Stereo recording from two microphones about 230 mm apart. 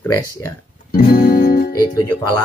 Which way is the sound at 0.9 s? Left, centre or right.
Left.